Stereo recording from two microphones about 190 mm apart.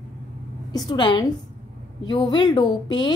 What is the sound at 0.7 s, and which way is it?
A woman's voice, 20° left (ahead or behind).